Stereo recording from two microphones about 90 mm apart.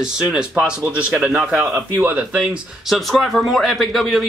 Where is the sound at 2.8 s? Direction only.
Centre (ahead or behind).